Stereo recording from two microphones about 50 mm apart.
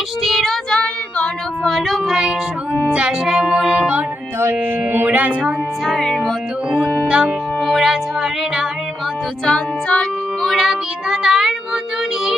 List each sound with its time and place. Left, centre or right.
0.2 s child singing: centre
1.6 s child singing: centre
2.9 s music: right
3.2 s music: centre
4.4 s music: right
5.0 s music: right
5.8 s music: centre
6.7 s music: centre
7.6 s music: centre
9.5 s music: centre
10.4 s child singing: centre